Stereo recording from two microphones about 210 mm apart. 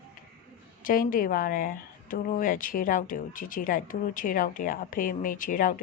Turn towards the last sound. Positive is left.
turn(degrees=40)  # may be behind; listen again after turning